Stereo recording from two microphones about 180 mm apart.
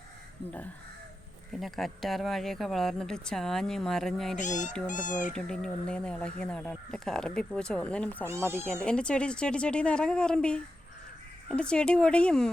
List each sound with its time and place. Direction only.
1.5 s speech: centre (ahead or behind)
4.4 s speech: 45° left (ahead or behind)
5.3 s speech: 5° left (ahead or behind)
8.3 s speech: 15° right (ahead or behind)
8.6 s speech: 5° left (ahead or behind)